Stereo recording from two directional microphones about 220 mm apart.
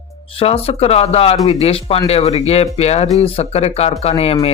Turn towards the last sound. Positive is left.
turn(degrees=30)  # may be behind; listen again after turning